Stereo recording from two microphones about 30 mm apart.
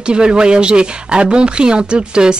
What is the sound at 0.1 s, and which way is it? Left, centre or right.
Speech, right.